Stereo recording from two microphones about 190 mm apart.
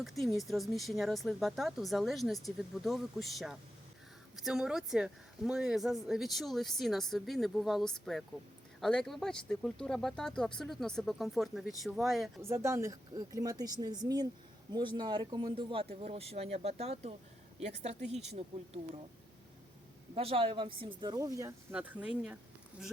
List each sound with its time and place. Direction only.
0.0 s speech: centre (ahead or behind)
12.4 s speech: 15° right (ahead or behind); by 18.8 s 35° right (ahead or behind)
20.1 s a woman's voice: 30° right (ahead or behind); by 22.4 s 5° right (ahead or behind)